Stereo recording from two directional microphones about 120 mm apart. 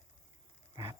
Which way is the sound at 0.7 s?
35° right (ahead or behind).